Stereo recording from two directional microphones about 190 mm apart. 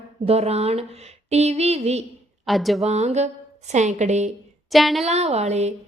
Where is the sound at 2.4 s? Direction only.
Centre (ahead or behind).